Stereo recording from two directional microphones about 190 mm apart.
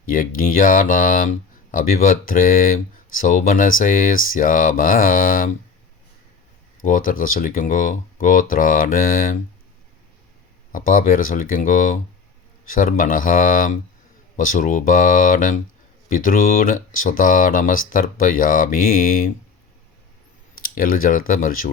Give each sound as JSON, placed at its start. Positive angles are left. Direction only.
{"t": 0.0, "sound": "speech", "side_deg": 45}
{"t": 6.8, "sound": "speech", "side_deg": 45}
{"t": 10.7, "sound": "speech", "side_deg": 45}
{"t": 20.6, "sound": "speech", "side_deg": 50}